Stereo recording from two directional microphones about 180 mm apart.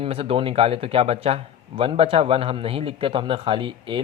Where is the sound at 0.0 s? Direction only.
30° right (ahead or behind).